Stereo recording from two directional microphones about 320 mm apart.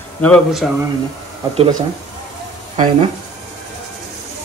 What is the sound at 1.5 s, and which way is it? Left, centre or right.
Speech, centre.